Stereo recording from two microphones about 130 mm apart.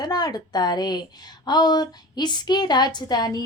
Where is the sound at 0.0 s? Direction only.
30° left (ahead or behind).